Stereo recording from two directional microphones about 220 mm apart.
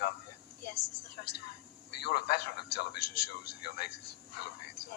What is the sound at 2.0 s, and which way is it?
A man's voice, 45° left (ahead or behind).